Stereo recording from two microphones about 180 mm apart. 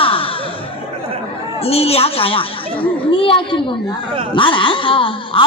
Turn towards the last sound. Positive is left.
turn(degrees=30)  # may be behind; listen again after turning